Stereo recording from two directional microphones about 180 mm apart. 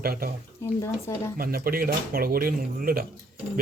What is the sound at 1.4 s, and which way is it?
Speech, 55° right (ahead or behind).